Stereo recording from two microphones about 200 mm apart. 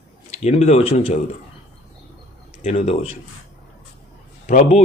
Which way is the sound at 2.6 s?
30° left (ahead or behind).